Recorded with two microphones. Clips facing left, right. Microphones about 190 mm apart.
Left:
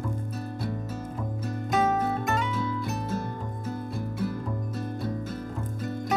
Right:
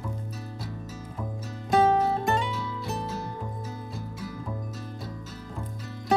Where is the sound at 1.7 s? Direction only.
30° right (ahead or behind).